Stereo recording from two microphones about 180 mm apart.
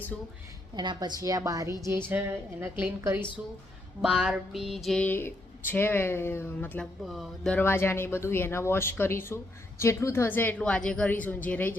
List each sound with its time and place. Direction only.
0.8 s a woman's voice: 25° right (ahead or behind); by 6.8 s 10° left (ahead or behind)
7.0 s speech: centre (ahead or behind)